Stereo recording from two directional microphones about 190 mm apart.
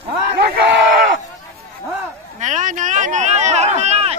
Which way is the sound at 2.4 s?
40° right (ahead or behind).